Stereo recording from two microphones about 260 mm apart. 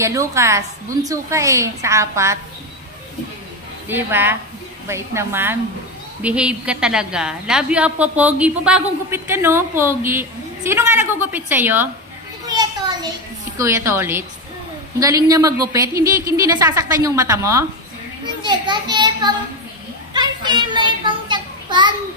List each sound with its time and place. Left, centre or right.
0.0 s a woman's voice: centre
3.9 s a woman's voice: centre
12.4 s children playing: centre
13.6 s a woman's voice: centre
20.2 s a sound: centre